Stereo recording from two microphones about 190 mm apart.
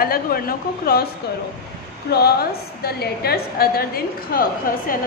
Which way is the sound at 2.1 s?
55° left (ahead or behind).